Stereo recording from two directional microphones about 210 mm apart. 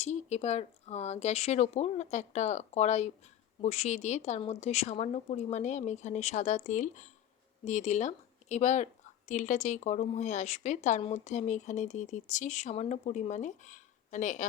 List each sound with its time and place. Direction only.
0.0 s a woman's voice: 30° left (ahead or behind)